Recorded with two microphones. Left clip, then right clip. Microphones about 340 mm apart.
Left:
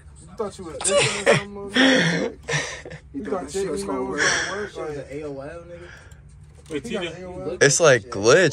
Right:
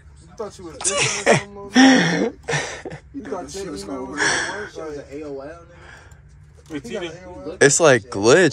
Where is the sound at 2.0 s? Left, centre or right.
Right.